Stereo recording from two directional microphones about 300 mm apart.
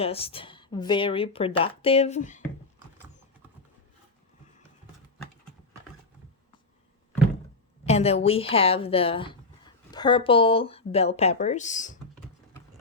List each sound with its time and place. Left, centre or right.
0.0 s speech: centre
7.9 s speech: left